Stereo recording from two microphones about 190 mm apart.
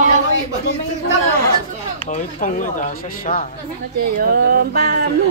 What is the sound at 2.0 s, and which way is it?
Speech, 45° left (ahead or behind).